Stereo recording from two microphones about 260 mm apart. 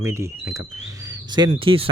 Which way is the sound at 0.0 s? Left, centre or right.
Centre.